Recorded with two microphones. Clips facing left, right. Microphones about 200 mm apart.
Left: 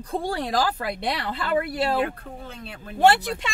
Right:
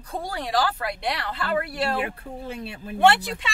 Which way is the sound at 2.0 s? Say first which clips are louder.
Even; 10° right (ahead or behind).